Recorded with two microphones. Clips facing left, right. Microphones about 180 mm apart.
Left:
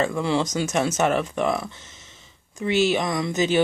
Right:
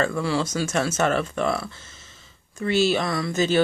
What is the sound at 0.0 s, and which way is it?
Speech, 20° left (ahead or behind).